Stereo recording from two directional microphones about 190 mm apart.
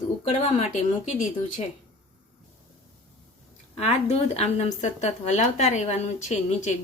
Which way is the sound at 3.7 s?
35° left (ahead or behind).